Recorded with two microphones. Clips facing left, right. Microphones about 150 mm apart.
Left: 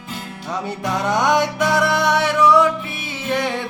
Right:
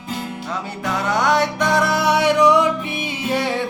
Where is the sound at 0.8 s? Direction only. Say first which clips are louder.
Even; 20° left (ahead or behind); by 3.6 s 10° right (ahead or behind).